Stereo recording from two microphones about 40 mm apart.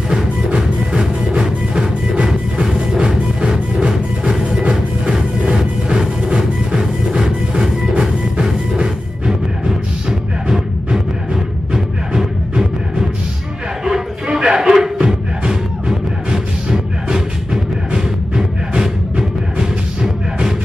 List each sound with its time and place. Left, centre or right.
0.6 s music: right
13.8 s a sound: centre
16.3 s music: centre
19.6 s music: centre